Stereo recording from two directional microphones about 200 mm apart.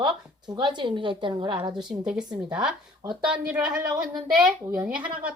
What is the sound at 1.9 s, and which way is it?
Speech, 10° right (ahead or behind).